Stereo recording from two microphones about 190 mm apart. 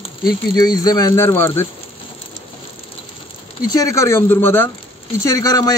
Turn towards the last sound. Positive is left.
turn(degrees=20)  # may be behind; listen again after turning